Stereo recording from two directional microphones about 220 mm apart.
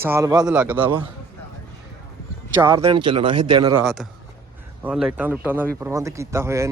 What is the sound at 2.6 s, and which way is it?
Speech, 10° right (ahead or behind).